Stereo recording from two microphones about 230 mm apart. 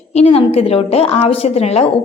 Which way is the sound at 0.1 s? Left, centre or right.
Left.